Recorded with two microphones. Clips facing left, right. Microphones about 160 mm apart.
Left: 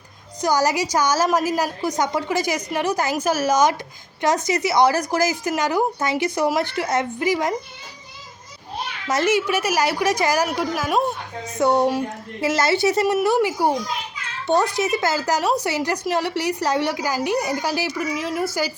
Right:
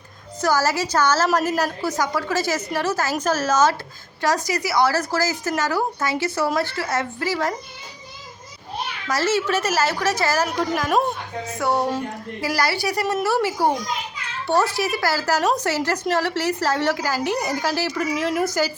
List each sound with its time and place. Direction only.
0.4 s a woman's voice: 15° left (ahead or behind)
9.0 s a woman's voice: 20° left (ahead or behind)
11.5 s a woman's voice: 20° left (ahead or behind)
18.2 s speech: centre (ahead or behind)